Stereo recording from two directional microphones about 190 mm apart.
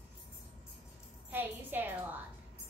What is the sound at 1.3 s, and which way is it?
Speech, 10° right (ahead or behind).